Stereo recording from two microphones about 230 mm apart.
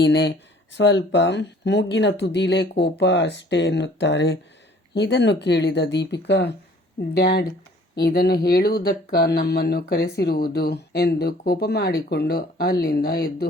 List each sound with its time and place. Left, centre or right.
0.0 s speech: left